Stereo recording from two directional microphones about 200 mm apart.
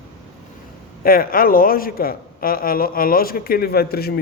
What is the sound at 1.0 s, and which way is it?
Speech, 45° left (ahead or behind).